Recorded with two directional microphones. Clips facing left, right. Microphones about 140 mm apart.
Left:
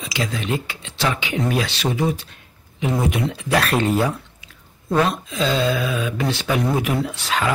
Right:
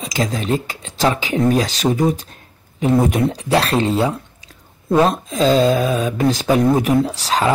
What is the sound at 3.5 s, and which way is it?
Speech, 30° right (ahead or behind).